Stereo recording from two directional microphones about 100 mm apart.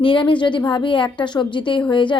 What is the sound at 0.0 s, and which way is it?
A woman's voice, 60° left (ahead or behind).